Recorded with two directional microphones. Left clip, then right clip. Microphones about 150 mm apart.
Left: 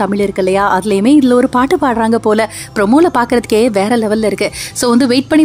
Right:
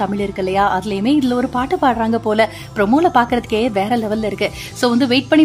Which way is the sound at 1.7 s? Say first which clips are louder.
Left 4 dB; 35° left (ahead or behind).